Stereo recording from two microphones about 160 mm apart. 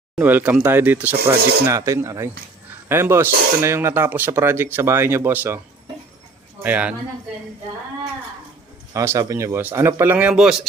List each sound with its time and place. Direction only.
0.2 s speech: 10° right (ahead or behind)
1.4 s speech: 90° right
1.6 s speech: 20° right (ahead or behind)
6.6 s speech: 10° right (ahead or behind)
8.9 s speech: 20° right (ahead or behind); by 10.7 s 5° right (ahead or behind)